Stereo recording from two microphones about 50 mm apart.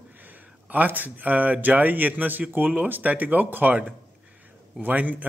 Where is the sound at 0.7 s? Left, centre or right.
Right.